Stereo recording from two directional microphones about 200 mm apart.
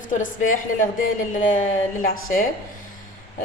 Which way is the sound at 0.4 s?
40° left (ahead or behind).